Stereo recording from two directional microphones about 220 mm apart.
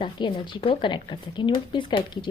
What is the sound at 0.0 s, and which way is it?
Speech, 20° left (ahead or behind).